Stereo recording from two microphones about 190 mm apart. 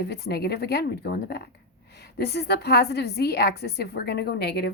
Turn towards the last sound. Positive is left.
turn(degrees=60)  # may be behind; listen again after turning